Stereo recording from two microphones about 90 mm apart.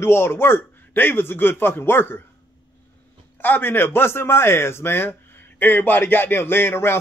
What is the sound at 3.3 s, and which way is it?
Speech, 20° left (ahead or behind).